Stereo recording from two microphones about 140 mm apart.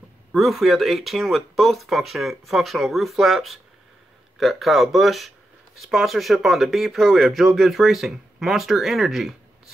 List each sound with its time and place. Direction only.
0.3 s speech: centre (ahead or behind)